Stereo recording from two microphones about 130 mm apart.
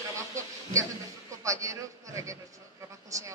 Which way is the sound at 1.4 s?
25° right (ahead or behind).